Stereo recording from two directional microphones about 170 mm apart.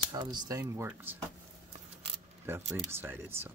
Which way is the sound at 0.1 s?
25° right (ahead or behind).